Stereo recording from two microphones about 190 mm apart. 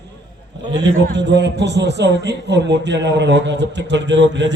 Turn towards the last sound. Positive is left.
turn(degrees=-70)  # may be behind; listen again after turning